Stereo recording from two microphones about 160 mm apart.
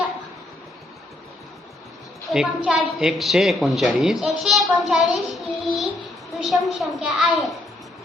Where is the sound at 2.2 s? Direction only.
5° right (ahead or behind).